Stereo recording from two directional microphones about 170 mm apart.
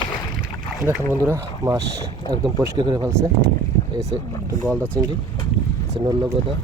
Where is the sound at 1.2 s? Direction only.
15° right (ahead or behind).